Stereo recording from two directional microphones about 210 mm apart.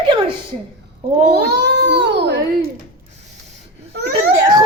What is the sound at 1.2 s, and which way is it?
Speech, 55° right (ahead or behind).